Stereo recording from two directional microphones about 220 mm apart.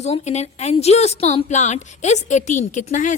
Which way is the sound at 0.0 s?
30° left (ahead or behind).